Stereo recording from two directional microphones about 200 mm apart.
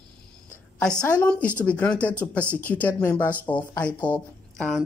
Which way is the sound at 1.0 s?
5° left (ahead or behind).